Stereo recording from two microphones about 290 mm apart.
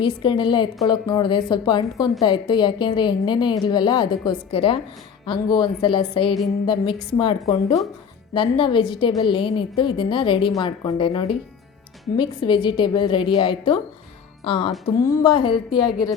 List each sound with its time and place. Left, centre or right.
0.0 s a woman's voice: centre